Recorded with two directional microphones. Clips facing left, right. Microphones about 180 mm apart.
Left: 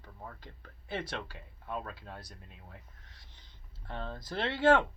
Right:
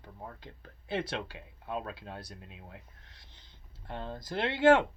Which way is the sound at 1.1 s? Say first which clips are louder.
Right 3 dB; 20° right (ahead or behind).